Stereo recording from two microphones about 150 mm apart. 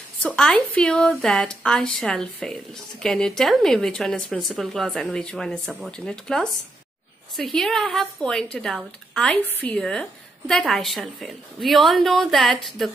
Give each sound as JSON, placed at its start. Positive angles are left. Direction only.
{"t": 0.4, "sound": "a woman's voice", "side_deg": 5}